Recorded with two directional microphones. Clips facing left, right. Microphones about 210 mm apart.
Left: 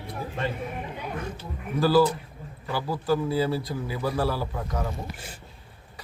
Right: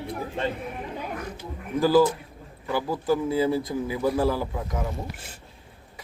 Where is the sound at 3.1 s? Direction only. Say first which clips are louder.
Right 2 dB; 20° right (ahead or behind).